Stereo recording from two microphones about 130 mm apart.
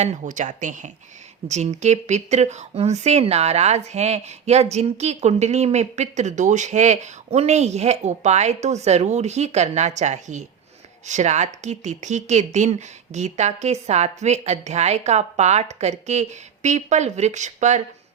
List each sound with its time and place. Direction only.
0.0 s speech: 70° right (ahead or behind)
1.5 s speech: 60° right (ahead or behind)